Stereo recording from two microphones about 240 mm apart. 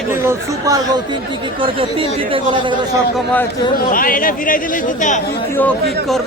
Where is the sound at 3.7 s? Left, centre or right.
Left.